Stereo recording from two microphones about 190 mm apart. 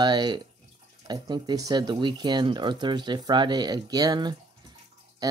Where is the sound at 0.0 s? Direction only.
25° right (ahead or behind).